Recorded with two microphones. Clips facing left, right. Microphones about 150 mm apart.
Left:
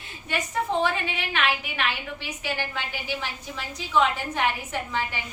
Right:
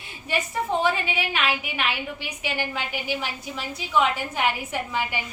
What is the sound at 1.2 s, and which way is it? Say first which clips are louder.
A woman's voice: right 1 dB; 5° right (ahead or behind).